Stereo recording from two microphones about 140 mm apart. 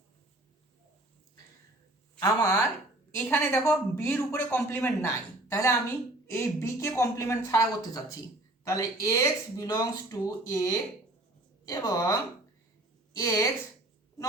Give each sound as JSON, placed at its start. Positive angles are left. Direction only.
{"t": 2.1, "sound": "speech", "side_deg": 20}
{"t": 13.1, "sound": "speech", "side_deg": 20}